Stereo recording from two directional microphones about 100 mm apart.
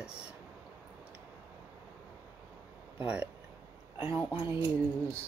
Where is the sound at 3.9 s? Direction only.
25° right (ahead or behind).